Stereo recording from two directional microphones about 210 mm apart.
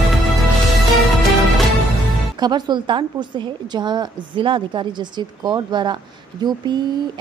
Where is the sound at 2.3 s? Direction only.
20° right (ahead or behind).